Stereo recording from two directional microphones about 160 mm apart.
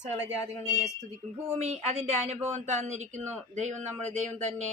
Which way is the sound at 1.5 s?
40° right (ahead or behind).